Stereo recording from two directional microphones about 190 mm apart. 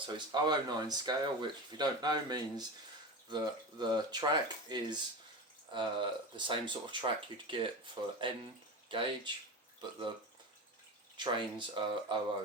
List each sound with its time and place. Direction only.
0.0 s speech: 20° right (ahead or behind)
11.2 s speech: 25° right (ahead or behind)